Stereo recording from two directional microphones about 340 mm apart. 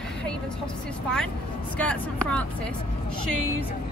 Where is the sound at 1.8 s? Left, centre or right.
Centre.